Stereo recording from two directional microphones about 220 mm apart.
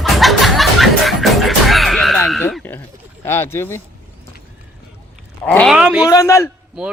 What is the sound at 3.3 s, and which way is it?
Speech, 10° left (ahead or behind).